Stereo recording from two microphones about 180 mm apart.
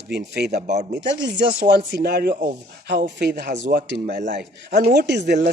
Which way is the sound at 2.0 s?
60° right (ahead or behind).